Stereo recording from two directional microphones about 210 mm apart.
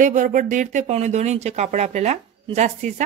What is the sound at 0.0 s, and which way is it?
Speech, 35° right (ahead or behind).